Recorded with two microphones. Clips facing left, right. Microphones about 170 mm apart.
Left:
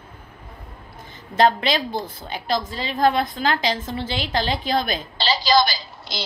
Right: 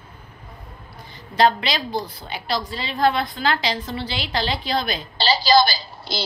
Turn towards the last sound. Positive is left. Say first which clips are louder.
# right 3 dB
turn(degrees=-30)  # may be behind; listen again after turning